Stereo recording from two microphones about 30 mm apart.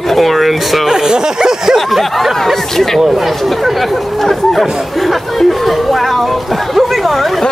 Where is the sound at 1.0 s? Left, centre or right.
Right.